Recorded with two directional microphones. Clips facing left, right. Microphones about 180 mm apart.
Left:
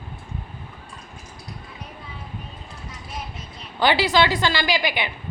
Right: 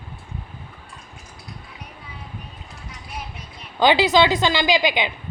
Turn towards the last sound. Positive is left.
turn(degrees=-20)  # may be behind; listen again after turning